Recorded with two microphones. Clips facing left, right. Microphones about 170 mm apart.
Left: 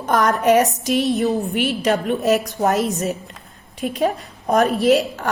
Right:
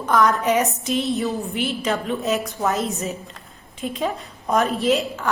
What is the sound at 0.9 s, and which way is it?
A woman's voice, 65° left (ahead or behind).